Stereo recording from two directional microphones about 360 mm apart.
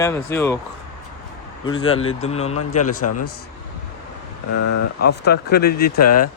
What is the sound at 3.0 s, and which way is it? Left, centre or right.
Speech, left.